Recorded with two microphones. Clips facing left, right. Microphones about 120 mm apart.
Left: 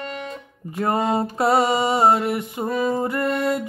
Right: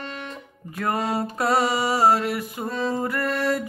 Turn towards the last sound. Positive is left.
turn(degrees=20)  # may be behind; listen again after turning